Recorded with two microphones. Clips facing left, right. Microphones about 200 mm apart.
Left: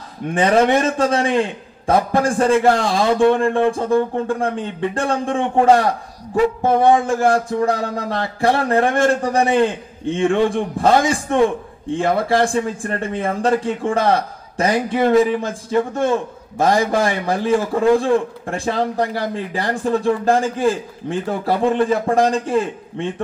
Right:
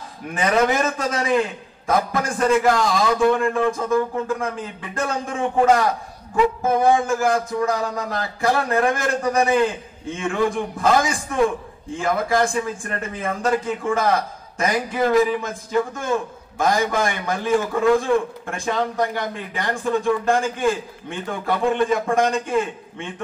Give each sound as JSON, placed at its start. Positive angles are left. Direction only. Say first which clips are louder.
{"t": 0.3, "sound": "a man's voice", "louder": "left 5 dB", "side_deg": 30}